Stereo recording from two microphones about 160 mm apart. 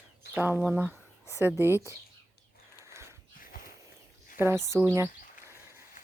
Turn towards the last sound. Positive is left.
turn(degrees=-15)  # may be behind; listen again after turning